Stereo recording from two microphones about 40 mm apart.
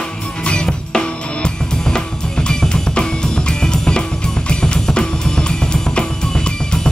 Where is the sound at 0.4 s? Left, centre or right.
Left.